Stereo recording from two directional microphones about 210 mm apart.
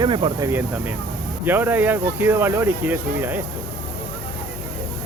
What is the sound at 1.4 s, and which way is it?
Speech, 10° right (ahead or behind).